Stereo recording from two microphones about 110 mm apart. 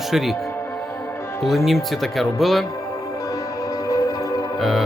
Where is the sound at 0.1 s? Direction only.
Centre (ahead or behind).